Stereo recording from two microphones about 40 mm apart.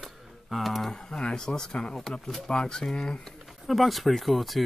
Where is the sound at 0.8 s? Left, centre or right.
Centre.